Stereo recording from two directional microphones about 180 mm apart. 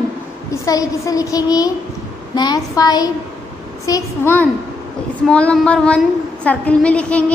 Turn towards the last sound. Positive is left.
turn(degrees=5)  # may be behind; listen again after turning